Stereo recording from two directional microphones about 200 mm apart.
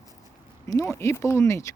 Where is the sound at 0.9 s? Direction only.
10° left (ahead or behind).